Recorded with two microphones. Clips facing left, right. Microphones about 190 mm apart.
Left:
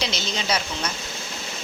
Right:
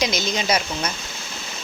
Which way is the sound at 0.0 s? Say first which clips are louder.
Right 5 dB; 15° right (ahead or behind).